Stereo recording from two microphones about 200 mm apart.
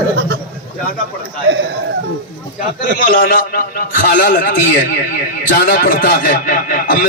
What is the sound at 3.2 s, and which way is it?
A man's voice, 50° left (ahead or behind).